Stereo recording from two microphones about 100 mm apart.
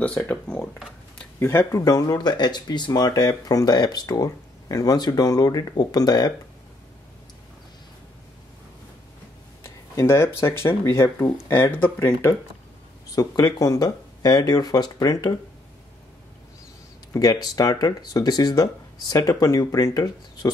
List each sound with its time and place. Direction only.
0.0 s speech: 15° left (ahead or behind)
1.4 s speech: 25° left (ahead or behind); by 6.3 s 40° left (ahead or behind)
9.6 s speech: 25° left (ahead or behind)
13.1 s speech: 40° left (ahead or behind)
17.1 s speech: 40° left (ahead or behind)